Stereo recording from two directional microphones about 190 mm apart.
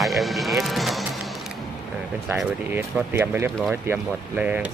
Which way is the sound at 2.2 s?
10° right (ahead or behind).